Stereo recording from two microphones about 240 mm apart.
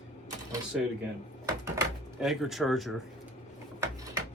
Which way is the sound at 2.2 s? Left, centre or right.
Centre.